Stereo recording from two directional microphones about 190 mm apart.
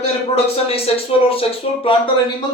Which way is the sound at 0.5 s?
30° left (ahead or behind).